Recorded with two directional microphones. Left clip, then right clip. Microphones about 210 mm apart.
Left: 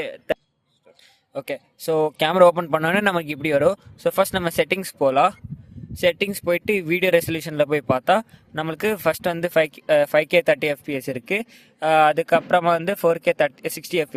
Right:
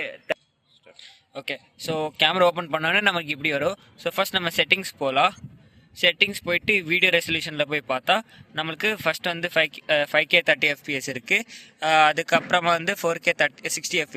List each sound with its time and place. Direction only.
0.0 s a man's voice: 65° left (ahead or behind)
1.0 s speech: 50° left (ahead or behind)